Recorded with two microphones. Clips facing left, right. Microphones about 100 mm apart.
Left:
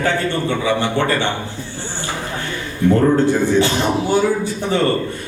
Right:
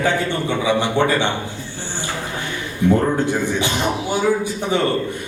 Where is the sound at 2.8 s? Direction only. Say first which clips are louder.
Left 3 dB; 15° right (ahead or behind).